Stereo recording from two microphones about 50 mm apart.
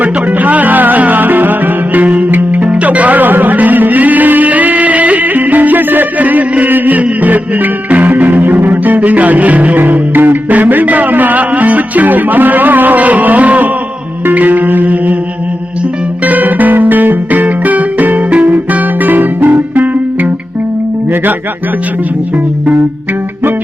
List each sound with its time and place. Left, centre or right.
0.0 s music: right
16.2 s music: right